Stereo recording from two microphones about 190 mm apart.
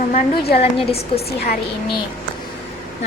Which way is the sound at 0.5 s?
30° left (ahead or behind).